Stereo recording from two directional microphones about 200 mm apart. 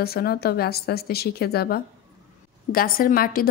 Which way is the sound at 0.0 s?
50° left (ahead or behind).